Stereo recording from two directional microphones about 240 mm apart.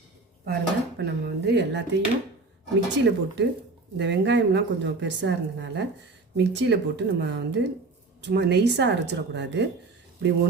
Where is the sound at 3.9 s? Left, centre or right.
Right.